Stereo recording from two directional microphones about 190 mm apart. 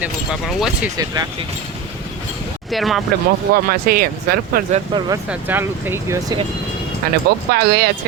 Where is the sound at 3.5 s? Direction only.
50° right (ahead or behind).